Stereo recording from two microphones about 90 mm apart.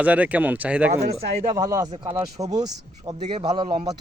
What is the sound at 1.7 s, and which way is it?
Speech, 40° right (ahead or behind).